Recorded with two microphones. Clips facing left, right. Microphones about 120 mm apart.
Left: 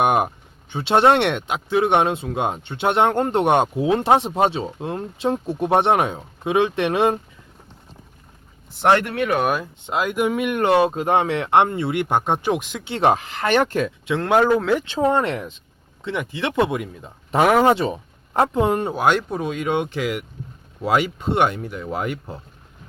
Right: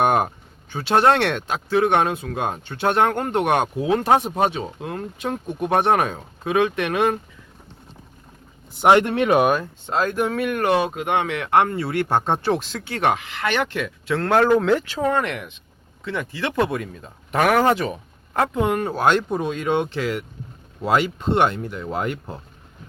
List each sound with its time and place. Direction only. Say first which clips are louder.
0.0 s speech: even; 15° left (ahead or behind)
0.7 s speech: left 1 dB; 25° left (ahead or behind)
8.9 s speech: right 3 dB; 25° right (ahead or behind)
9.4 s speech: right 3 dB; 5° left (ahead or behind)
9.8 s speech: left 2 dB; 15° left (ahead or behind); by 13.9 s 40° left (ahead or behind)
14.0 s speech: even; 15° left (ahead or behind)
14.8 s speech: left 3 dB; 25° left (ahead or behind)
16.0 s speech: left 1 dB; 20° left (ahead or behind)
18.9 s speech: even; 10° left (ahead or behind)